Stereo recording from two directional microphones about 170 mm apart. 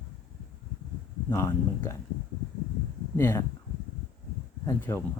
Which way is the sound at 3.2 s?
15° left (ahead or behind).